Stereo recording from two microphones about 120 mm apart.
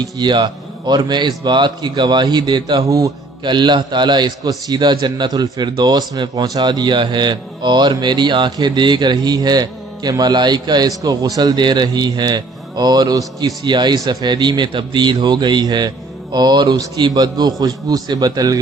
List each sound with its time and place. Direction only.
0.0 s a man's voice: 40° right (ahead or behind)